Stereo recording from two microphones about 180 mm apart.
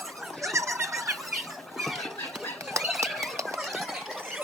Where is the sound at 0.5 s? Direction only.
15° right (ahead or behind).